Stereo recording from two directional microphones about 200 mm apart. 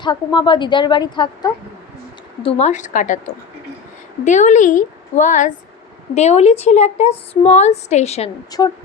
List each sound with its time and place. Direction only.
0.0 s a woman's voice: 20° left (ahead or behind); by 3.2 s 40° left (ahead or behind)
4.3 s a woman's voice: 35° left (ahead or behind)